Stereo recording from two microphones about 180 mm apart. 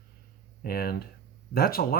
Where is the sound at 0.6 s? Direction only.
60° left (ahead or behind).